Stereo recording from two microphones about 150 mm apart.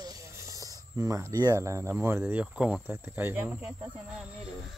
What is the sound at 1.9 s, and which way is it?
Speech, 15° right (ahead or behind).